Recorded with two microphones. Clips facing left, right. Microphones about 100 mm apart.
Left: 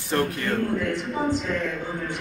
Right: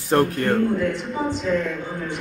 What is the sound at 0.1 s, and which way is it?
Speech, 50° right (ahead or behind).